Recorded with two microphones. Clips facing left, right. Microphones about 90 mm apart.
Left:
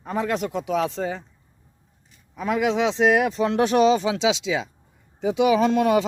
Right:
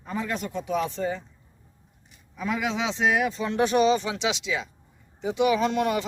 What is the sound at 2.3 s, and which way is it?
Speech, 55° left (ahead or behind).